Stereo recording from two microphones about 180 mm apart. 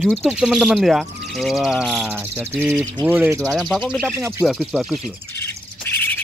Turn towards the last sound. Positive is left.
turn(degrees=10)  # may be behind; listen again after turning